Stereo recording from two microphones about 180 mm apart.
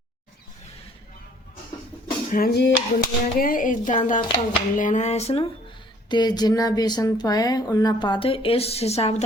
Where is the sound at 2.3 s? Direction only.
60° left (ahead or behind).